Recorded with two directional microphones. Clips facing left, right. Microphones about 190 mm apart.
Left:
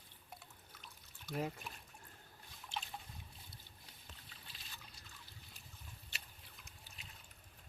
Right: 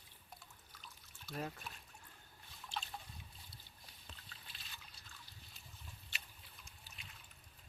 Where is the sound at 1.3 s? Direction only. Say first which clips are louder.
Left 4 dB; 15° left (ahead or behind).